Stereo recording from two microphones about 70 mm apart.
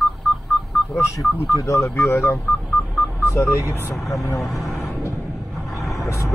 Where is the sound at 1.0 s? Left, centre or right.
Left.